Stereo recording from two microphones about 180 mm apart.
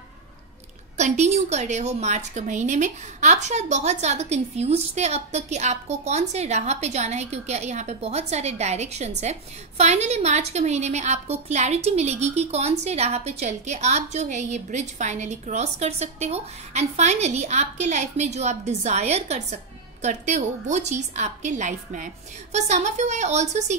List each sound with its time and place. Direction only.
0.9 s a woman's voice: 40° right (ahead or behind)